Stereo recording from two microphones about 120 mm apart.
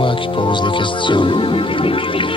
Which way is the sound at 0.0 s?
45° left (ahead or behind).